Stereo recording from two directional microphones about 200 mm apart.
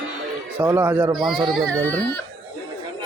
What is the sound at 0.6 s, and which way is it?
A man's voice, 10° right (ahead or behind).